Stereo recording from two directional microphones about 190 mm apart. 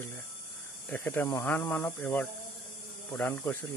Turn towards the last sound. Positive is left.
turn(degrees=10)  # may be behind; listen again after turning